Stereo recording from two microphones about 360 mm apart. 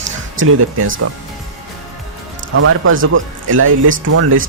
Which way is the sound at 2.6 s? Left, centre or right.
Right.